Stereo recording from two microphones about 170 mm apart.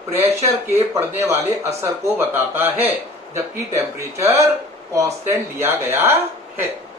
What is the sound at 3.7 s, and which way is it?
Speech, 15° right (ahead or behind).